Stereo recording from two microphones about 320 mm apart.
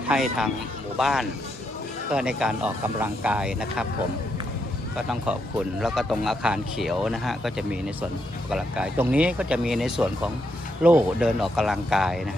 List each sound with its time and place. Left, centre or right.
0.1 s speech: centre
4.9 s speech: centre